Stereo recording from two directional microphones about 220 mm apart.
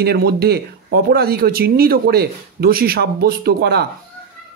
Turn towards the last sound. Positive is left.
turn(degrees=-45)  # may be behind; listen again after turning